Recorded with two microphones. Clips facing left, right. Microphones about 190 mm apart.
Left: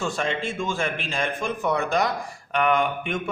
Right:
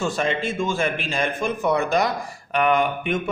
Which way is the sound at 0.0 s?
5° right (ahead or behind).